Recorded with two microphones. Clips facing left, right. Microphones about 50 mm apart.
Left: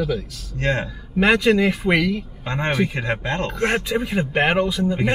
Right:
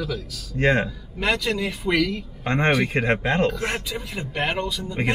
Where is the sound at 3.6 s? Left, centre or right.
Left.